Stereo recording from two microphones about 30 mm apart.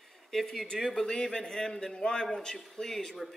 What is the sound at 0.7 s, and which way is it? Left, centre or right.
Speech, centre.